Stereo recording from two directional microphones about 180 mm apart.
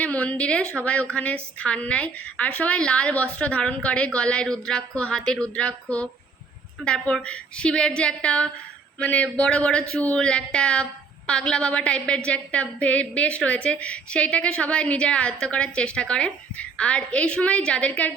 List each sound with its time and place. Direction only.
0.0 s a woman's voice: 5° left (ahead or behind)